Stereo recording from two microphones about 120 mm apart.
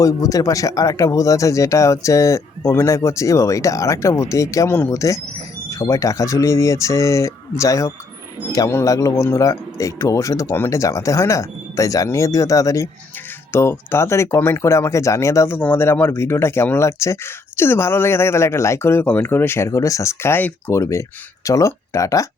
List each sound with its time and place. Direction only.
0.0 s speech: 30° left (ahead or behind)